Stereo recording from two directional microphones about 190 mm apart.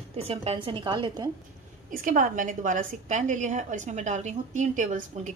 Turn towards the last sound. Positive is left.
turn(degrees=-40)  # may be behind; listen again after turning